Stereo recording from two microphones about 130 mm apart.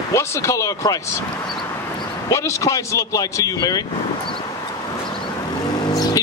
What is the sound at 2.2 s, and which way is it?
Speech, 25° left (ahead or behind).